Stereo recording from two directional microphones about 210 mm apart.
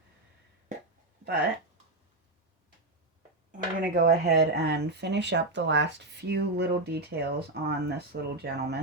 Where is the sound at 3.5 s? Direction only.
40° right (ahead or behind).